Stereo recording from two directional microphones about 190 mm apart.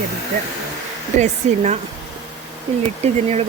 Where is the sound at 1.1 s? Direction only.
35° right (ahead or behind).